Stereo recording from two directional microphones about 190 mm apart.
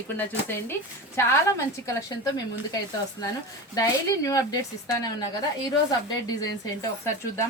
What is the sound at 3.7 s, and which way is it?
Speech, 20° left (ahead or behind).